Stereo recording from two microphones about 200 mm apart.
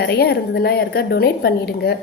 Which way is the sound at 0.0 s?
50° left (ahead or behind).